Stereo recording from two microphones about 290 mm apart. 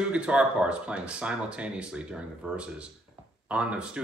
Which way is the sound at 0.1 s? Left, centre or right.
Centre.